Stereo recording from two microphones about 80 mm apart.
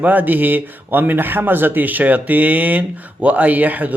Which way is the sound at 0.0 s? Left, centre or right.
Right.